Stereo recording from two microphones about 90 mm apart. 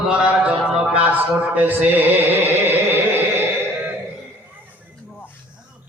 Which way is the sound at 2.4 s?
25° right (ahead or behind).